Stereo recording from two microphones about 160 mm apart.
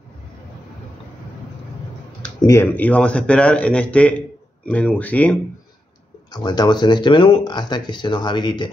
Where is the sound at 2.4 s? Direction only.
15° left (ahead or behind).